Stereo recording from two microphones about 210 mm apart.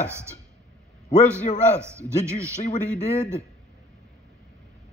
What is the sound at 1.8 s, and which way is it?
Speech, 10° right (ahead or behind).